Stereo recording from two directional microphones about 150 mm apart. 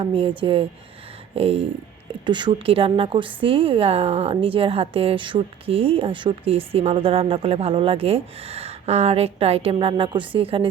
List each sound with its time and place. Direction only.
0.0 s a woman's voice: 35° right (ahead or behind)